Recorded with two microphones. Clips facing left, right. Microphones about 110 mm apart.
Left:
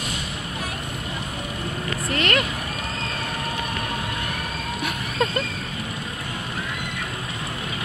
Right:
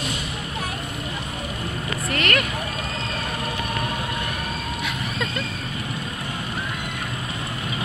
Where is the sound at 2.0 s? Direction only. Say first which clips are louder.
Left 1 dB; 30° left (ahead or behind).